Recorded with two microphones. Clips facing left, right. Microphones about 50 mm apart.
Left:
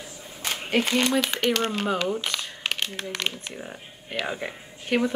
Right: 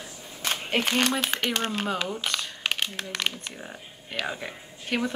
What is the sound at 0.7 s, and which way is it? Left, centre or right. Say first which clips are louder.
Speech: left 2 dB; right.